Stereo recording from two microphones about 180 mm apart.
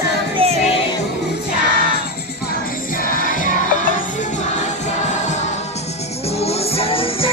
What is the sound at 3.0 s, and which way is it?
Music, 50° left (ahead or behind).